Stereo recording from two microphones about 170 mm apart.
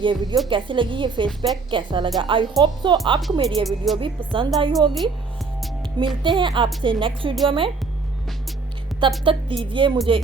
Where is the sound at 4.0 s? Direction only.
30° right (ahead or behind).